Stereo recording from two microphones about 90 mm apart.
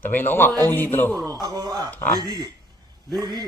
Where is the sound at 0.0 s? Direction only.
20° left (ahead or behind).